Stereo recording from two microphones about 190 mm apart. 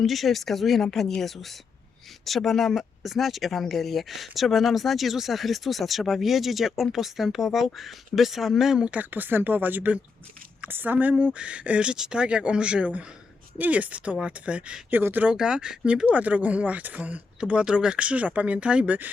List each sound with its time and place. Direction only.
0.0 s speech: centre (ahead or behind)